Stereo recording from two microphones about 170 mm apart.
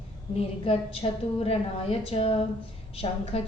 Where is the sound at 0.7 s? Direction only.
35° left (ahead or behind).